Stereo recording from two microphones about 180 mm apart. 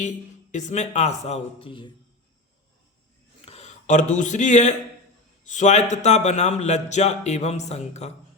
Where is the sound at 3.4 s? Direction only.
35° left (ahead or behind).